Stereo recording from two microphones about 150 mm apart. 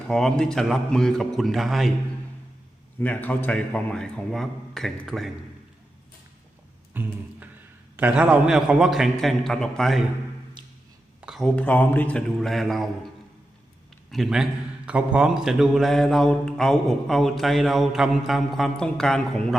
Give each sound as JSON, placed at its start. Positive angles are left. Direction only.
{"t": 0.1, "sound": "speech", "side_deg": 5}
{"t": 3.0, "sound": "speech", "side_deg": 10}
{"t": 6.9, "sound": "a sound", "side_deg": -15}
{"t": 7.9, "sound": "speech", "side_deg": -10}
{"t": 11.2, "sound": "speech", "side_deg": 0}
{"t": 14.1, "sound": "speech", "side_deg": 0}